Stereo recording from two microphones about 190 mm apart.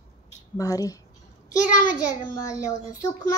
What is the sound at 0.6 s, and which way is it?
Speech, 20° left (ahead or behind).